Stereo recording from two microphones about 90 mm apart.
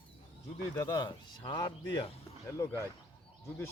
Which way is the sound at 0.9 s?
45° left (ahead or behind).